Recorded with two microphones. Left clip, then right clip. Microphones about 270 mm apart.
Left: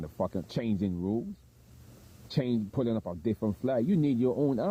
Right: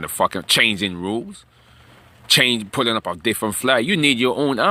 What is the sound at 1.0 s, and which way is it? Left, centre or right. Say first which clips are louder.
Speech: right 8 dB; right.